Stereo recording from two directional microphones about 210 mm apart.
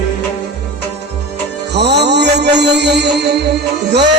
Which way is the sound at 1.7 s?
55° right (ahead or behind).